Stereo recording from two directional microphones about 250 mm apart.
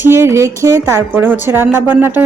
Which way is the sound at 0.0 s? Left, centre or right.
Centre.